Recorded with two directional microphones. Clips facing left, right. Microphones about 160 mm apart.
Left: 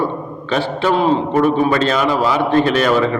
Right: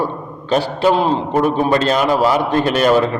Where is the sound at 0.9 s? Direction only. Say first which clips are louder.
Left 1 dB; centre (ahead or behind).